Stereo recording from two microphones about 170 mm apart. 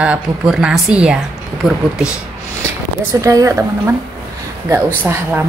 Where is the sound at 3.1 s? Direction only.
20° right (ahead or behind).